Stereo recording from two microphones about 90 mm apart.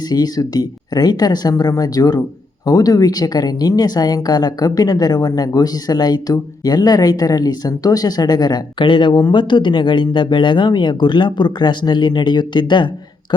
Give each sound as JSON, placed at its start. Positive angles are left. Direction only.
{"t": 0.1, "sound": "a woman's voice", "side_deg": 45}